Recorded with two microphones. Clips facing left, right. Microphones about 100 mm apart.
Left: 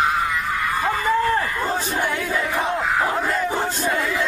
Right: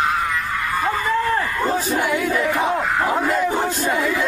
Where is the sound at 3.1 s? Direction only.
10° right (ahead or behind).